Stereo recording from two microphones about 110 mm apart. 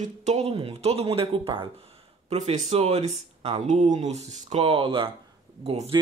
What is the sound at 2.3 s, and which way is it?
Speech, 80° right.